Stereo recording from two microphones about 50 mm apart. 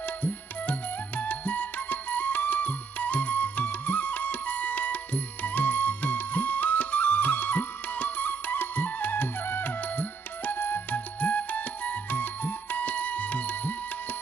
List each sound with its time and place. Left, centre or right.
0.0 s music: left